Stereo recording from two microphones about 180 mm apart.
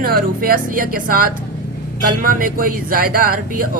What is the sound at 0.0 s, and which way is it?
Speech, 55° right (ahead or behind).